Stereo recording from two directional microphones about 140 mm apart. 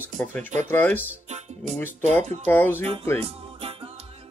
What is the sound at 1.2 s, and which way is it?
Music, 50° right (ahead or behind).